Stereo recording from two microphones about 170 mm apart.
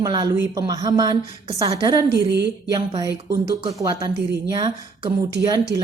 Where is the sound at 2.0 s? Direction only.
80° right.